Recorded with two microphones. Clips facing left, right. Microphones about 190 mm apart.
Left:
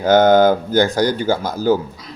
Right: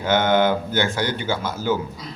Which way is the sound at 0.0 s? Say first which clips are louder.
Left 7 dB; 40° left (ahead or behind).